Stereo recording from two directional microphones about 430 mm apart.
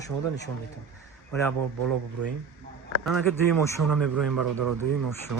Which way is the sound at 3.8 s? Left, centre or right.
Right.